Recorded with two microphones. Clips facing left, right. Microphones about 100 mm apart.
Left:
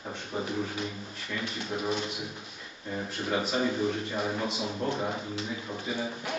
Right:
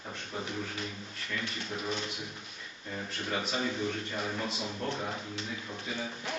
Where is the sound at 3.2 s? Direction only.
5° left (ahead or behind).